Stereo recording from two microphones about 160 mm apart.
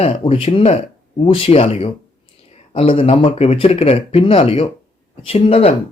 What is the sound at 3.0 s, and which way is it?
Speech, 35° left (ahead or behind).